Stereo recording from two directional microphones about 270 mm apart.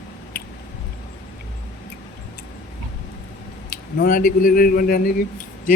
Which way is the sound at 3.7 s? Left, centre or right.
Left.